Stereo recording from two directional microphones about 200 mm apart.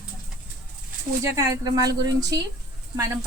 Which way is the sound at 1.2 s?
15° right (ahead or behind).